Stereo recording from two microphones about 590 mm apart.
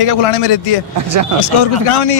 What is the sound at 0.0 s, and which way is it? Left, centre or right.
Speech, left.